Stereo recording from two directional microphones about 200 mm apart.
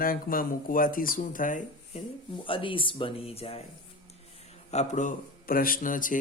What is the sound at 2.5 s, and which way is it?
A man's voice, 25° left (ahead or behind).